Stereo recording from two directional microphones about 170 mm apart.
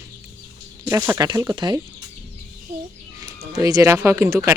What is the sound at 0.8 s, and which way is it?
Speech, 15° right (ahead or behind).